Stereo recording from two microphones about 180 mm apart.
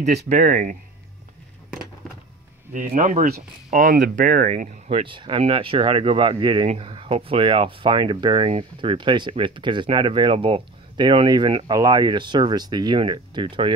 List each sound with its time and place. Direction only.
0.3 s speech: 45° right (ahead or behind)
2.7 s speech: 45° right (ahead or behind)
4.9 s speech: 30° right (ahead or behind)